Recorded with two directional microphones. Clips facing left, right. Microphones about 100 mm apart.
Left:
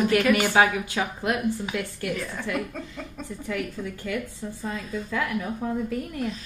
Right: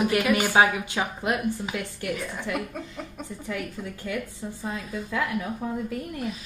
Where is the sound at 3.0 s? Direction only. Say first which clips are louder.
Even; 10° right (ahead or behind).